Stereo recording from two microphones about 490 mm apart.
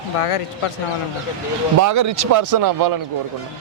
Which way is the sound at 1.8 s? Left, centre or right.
Right.